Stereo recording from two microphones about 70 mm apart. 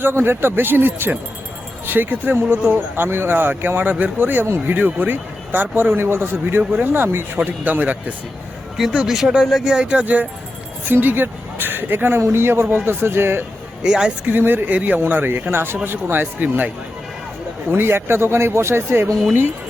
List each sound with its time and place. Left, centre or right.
0.0 s speech: right
9.0 s a woman's voice: centre; by 13.4 s right
13.8 s speech: centre
14.3 s speech: right